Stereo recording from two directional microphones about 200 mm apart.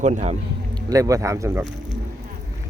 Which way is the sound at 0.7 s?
15° right (ahead or behind).